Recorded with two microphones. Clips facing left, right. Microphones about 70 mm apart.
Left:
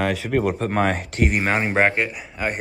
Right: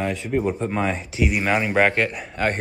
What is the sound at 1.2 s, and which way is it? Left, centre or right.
Speech, left.